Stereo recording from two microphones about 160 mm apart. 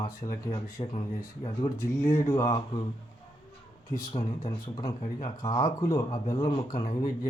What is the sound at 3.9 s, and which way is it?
Speech, 25° left (ahead or behind).